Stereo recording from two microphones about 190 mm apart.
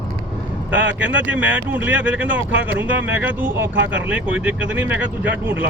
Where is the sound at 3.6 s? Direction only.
70° right (ahead or behind).